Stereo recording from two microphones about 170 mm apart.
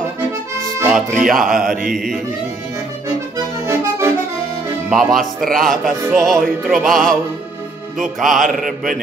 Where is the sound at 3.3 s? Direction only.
15° right (ahead or behind).